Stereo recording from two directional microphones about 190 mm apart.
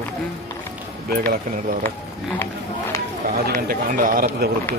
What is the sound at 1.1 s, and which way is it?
Speech, 55° right (ahead or behind).